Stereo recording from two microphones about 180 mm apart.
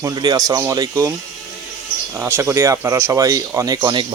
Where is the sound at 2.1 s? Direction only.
15° right (ahead or behind).